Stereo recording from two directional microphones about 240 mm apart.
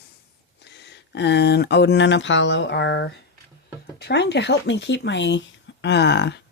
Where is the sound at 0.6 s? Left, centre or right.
Left.